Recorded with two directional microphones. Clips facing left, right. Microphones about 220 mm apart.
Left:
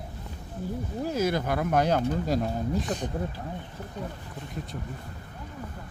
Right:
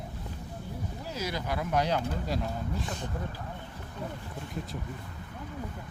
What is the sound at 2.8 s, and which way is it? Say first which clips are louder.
Speech: left 7 dB; 15° left (ahead or behind).